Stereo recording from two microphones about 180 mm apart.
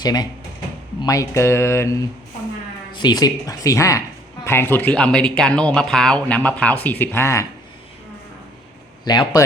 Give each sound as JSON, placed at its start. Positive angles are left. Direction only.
{"t": 0.0, "sound": "speech", "side_deg": 20}
{"t": 9.0, "sound": "speech", "side_deg": 25}